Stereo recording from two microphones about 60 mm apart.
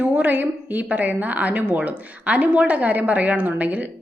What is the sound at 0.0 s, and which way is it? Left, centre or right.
A woman's voice, right.